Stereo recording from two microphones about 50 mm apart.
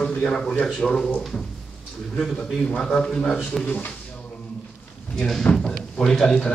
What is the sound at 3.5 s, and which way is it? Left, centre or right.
Speech, centre.